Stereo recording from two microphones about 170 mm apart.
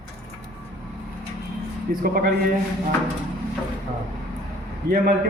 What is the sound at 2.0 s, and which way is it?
Speech, 60° right (ahead or behind).